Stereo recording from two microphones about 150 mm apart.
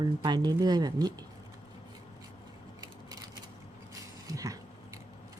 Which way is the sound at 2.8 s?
25° right (ahead or behind).